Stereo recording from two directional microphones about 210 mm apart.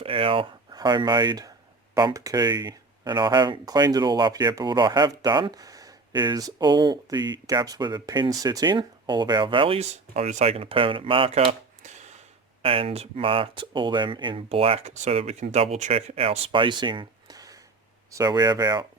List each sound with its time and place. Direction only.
0.0 s speech: 25° right (ahead or behind)